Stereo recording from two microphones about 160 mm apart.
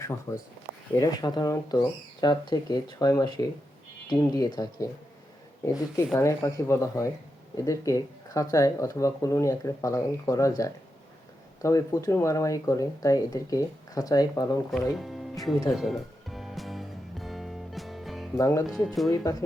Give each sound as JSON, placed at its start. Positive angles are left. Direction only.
{"t": 0.0, "sound": "speech", "side_deg": 20}
{"t": 6.1, "sound": "speech", "side_deg": 20}
{"t": 14.9, "sound": "speech", "side_deg": 0}
{"t": 15.7, "sound": "music", "side_deg": 0}
{"t": 18.3, "sound": "speech", "side_deg": 20}